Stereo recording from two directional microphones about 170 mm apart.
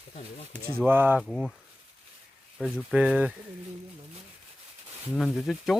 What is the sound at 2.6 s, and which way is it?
Speech, 5° right (ahead or behind).